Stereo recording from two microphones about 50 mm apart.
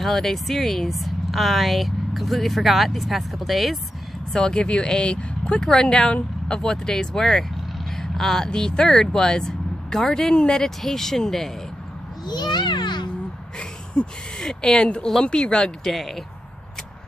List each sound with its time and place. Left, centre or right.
0.0 s speech: centre
4.3 s speech: centre
14.4 s speech: centre
15.9 s speech: centre